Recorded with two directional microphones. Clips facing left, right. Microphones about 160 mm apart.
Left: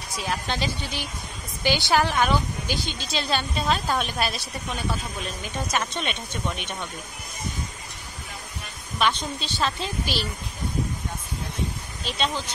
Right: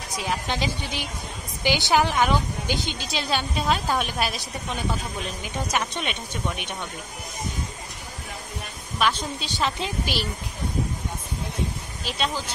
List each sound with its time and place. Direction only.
0.2 s a woman's voice: 15° right (ahead or behind)
8.9 s a woman's voice: 5° right (ahead or behind)
12.1 s speech: 5° right (ahead or behind)